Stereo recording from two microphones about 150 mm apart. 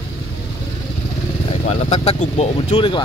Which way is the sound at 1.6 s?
45° left (ahead or behind).